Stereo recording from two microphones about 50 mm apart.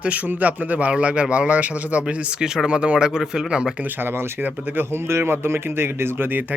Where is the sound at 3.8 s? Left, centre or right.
Right.